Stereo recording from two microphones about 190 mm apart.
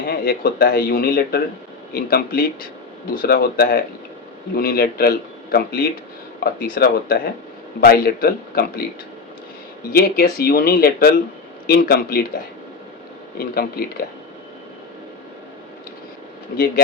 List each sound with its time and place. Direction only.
0.1 s speech: 50° left (ahead or behind)
9.9 s speech: 55° left (ahead or behind)
13.4 s speech: 55° left (ahead or behind)